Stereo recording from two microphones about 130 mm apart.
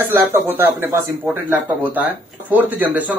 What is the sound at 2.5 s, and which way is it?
Speech, 10° right (ahead or behind).